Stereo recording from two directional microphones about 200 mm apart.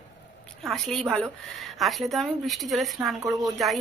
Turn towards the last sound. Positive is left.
turn(degrees=0)  # may be behind; listen again after turning